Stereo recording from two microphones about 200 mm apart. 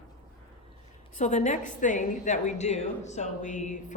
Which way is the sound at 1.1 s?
35° left (ahead or behind).